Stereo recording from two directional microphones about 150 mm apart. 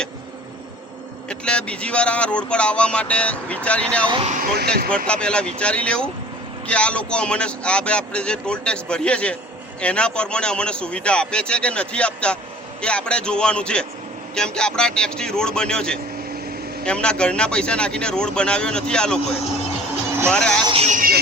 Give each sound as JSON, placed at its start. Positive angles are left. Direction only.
{"t": 1.3, "sound": "speech", "side_deg": 5}
{"t": 4.3, "sound": "speech", "side_deg": -75}
{"t": 5.0, "sound": "a man's voice", "side_deg": 5}
{"t": 20.3, "sound": "a man's voice", "side_deg": 5}
{"t": 20.8, "sound": "speech", "side_deg": -55}